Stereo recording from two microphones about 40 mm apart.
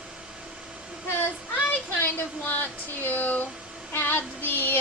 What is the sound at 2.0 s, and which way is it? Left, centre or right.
Speech, left.